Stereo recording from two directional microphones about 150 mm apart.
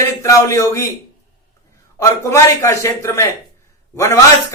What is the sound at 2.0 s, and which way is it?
Speech, 20° left (ahead or behind).